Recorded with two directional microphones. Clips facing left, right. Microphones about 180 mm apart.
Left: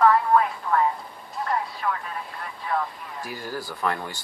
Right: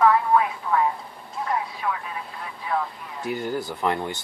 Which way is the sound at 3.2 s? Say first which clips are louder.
Right 7 dB; 20° right (ahead or behind).